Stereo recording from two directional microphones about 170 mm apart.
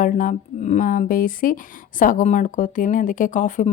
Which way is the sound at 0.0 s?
50° left (ahead or behind).